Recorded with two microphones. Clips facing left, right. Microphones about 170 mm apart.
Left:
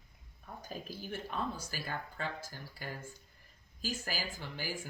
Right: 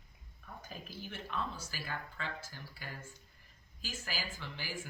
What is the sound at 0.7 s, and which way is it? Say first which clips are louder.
Speech: left 5 dB; 40° left (ahead or behind).